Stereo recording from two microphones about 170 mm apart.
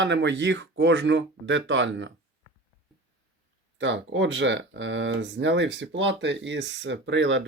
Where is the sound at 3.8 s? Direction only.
90° right.